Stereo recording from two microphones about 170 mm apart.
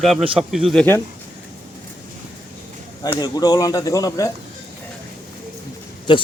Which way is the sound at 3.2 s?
20° left (ahead or behind).